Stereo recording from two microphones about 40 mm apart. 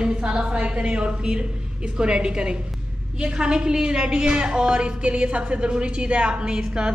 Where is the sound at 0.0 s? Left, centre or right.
Right.